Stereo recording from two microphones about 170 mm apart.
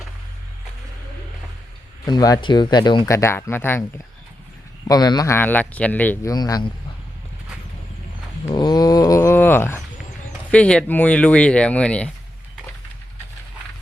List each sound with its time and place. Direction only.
2.0 s speech: 25° left (ahead or behind)
6.3 s speech: 25° left (ahead or behind)
8.5 s a sound: 25° left (ahead or behind)
10.5 s speech: 5° left (ahead or behind)